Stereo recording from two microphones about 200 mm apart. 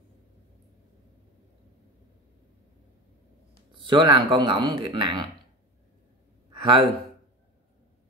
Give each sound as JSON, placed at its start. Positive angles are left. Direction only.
{"t": 3.7, "sound": "speech", "side_deg": -25}
{"t": 6.6, "sound": "speech", "side_deg": -25}